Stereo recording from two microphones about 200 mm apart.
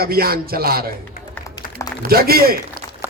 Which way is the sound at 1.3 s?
15° left (ahead or behind).